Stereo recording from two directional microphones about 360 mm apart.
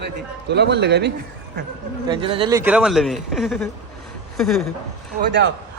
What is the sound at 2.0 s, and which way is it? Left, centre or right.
Speech, centre.